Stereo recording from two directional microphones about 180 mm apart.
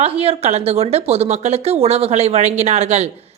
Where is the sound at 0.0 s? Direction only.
35° right (ahead or behind).